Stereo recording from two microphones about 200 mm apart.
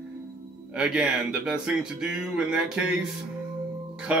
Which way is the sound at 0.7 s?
5° right (ahead or behind).